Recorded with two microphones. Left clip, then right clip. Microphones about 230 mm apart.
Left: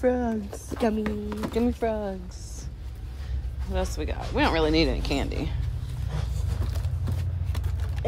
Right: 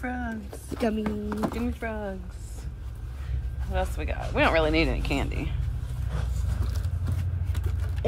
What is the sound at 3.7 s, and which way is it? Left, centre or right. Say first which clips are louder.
Speech: even; centre.